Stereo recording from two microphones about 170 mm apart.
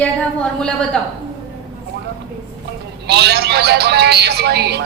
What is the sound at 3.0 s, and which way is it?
Speech, 75° right (ahead or behind).